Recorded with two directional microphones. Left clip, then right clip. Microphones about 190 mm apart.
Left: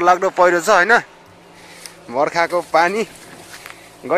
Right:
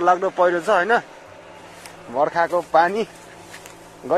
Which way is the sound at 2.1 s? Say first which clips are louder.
Left 2 dB; 30° left (ahead or behind).